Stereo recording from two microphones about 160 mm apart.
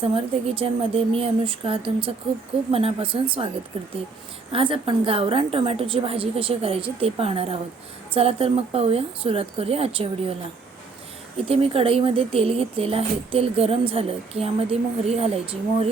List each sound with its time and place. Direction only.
0.0 s speech: 35° right (ahead or behind)
11.4 s speech: 35° right (ahead or behind)